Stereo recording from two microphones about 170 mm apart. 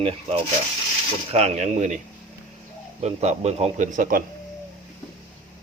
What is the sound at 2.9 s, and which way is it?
Speech, 40° right (ahead or behind).